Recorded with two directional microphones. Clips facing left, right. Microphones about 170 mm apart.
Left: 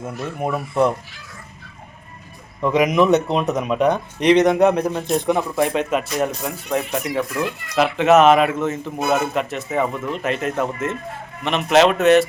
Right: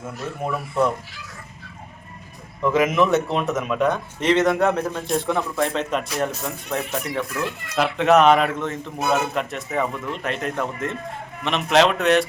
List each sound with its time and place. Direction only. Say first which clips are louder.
2.6 s speech: left 2 dB; 15° left (ahead or behind)